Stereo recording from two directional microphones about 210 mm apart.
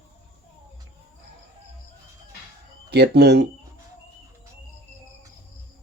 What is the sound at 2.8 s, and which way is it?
Speech, 50° right (ahead or behind).